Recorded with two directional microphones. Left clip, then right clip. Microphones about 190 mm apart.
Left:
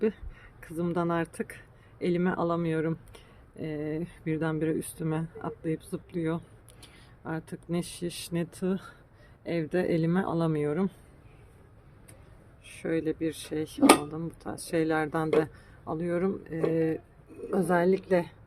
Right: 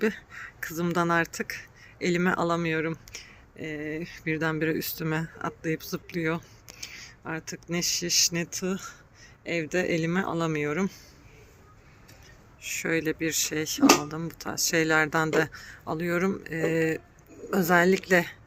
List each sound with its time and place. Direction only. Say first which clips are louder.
0.0 s speech: right 2 dB; 5° left (ahead or behind)
6.7 s speech: right 14 dB; 20° left (ahead or behind)
12.6 s speech: right 3 dB; 5° left (ahead or behind)